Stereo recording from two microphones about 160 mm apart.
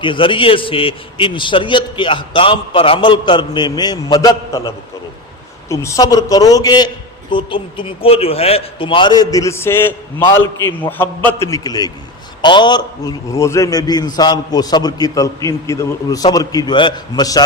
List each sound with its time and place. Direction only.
0.0 s a man's voice: 30° left (ahead or behind)